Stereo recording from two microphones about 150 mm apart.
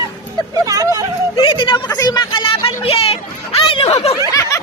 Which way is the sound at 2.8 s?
40° left (ahead or behind).